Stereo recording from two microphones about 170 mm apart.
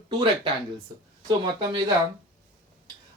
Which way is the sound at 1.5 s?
30° right (ahead or behind).